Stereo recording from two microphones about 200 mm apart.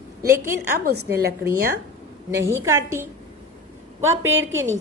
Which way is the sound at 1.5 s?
50° right (ahead or behind).